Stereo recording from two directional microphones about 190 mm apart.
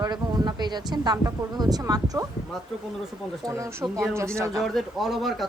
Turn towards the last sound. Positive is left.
turn(degrees=0)  # may be behind; listen again after turning